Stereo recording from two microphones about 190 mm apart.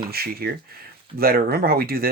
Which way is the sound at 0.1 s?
55° right (ahead or behind).